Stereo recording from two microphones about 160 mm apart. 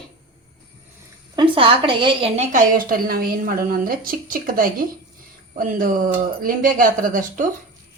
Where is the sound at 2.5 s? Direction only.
65° right (ahead or behind).